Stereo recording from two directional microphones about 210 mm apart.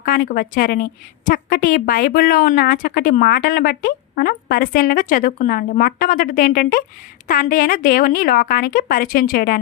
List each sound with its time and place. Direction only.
0.0 s a woman's voice: 45° left (ahead or behind)